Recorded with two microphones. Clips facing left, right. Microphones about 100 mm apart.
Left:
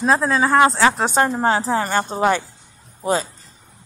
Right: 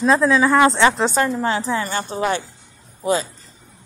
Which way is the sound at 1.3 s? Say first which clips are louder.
Left 2 dB; 40° left (ahead or behind).